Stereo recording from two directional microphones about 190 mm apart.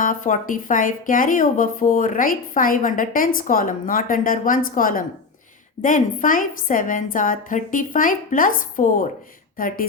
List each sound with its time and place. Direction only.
0.0 s speech: 45° left (ahead or behind)